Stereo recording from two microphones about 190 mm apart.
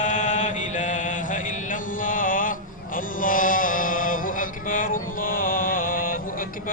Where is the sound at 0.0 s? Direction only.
40° left (ahead or behind).